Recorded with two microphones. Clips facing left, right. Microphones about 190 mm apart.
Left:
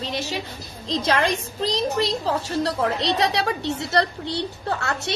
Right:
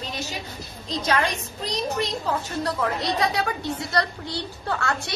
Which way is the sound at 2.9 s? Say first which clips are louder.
Left 2 dB; 75° left (ahead or behind).